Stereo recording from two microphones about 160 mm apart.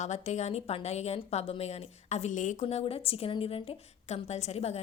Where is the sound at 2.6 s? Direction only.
40° left (ahead or behind).